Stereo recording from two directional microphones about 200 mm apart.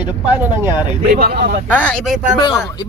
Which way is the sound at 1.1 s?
45° right (ahead or behind).